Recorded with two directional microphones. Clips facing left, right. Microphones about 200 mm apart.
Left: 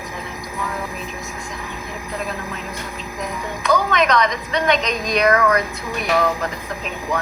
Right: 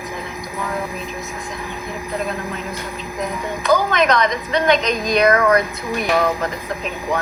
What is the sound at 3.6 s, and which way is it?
Music, 35° right (ahead or behind).